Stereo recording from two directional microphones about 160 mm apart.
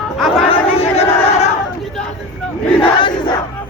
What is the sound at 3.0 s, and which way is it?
Battle cry, 30° left (ahead or behind).